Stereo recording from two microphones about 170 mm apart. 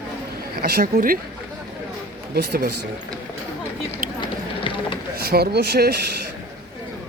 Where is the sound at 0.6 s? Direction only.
60° right (ahead or behind).